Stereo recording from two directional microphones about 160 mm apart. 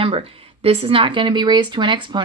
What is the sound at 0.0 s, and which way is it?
Speech, 35° right (ahead or behind).